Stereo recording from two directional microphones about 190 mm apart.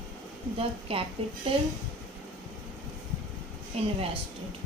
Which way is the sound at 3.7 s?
30° right (ahead or behind).